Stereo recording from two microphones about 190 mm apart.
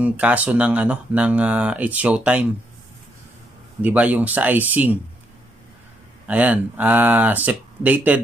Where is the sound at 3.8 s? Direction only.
10° right (ahead or behind).